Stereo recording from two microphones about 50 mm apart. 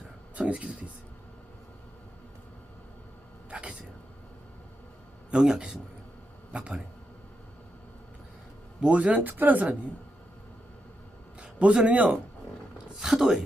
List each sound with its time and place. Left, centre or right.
0.3 s speech: right
3.5 s a sound: right
5.3 s speech: centre
8.8 s a woman's voice: right
11.3 s speech: right
13.0 s speech: centre